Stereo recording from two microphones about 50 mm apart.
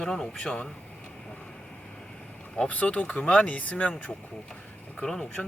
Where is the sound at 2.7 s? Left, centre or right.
Left.